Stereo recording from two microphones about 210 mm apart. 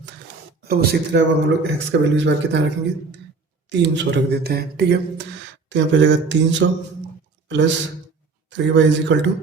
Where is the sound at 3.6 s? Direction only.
55° right (ahead or behind).